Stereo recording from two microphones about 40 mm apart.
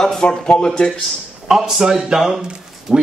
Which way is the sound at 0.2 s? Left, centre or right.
Left.